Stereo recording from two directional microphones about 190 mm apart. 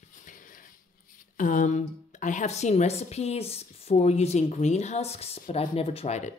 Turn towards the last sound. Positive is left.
turn(degrees=35)  # may be behind; listen again after turning